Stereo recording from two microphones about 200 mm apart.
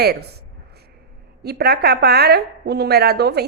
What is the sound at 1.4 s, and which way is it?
A woman's voice, 55° right (ahead or behind).